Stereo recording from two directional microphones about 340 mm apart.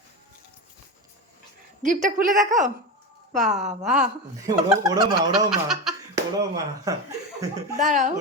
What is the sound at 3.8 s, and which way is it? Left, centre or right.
A man's voice, centre.